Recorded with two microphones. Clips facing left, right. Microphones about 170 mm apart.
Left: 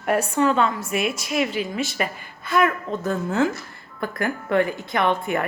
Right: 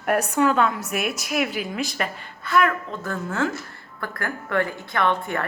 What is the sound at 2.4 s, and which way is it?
A woman's voice, 20° left (ahead or behind).